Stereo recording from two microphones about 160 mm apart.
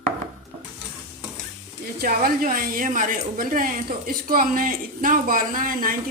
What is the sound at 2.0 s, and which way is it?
A woman's voice, 65° right (ahead or behind).